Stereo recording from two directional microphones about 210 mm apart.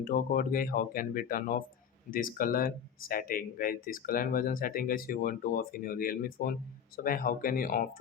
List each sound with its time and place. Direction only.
0.0 s speech: 40° left (ahead or behind)